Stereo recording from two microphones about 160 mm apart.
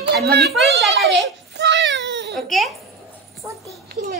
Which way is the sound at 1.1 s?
90° right.